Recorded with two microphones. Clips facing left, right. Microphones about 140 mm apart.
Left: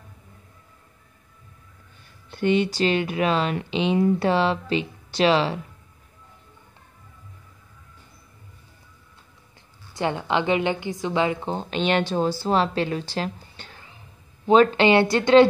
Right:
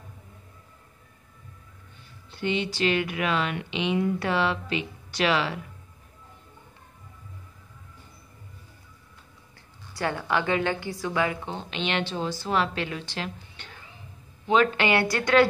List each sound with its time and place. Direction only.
2.3 s speech: 50° left (ahead or behind); by 5.6 s 30° left (ahead or behind)
9.9 s a woman's voice: 20° left (ahead or behind)
11.4 s a woman's voice: 40° left (ahead or behind); by 15.4 s 25° left (ahead or behind)